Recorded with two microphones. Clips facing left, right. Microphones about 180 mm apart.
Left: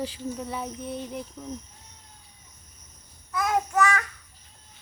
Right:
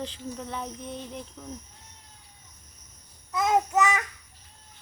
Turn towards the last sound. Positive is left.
turn(degrees=-20)  # may be behind; listen again after turning